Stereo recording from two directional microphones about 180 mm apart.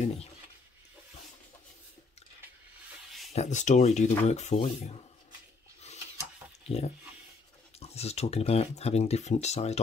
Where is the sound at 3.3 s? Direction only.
40° left (ahead or behind).